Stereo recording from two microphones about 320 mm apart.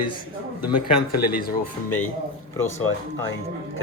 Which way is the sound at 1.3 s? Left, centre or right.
Left.